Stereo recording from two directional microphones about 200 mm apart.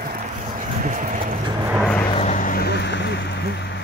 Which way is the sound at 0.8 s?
40° right (ahead or behind).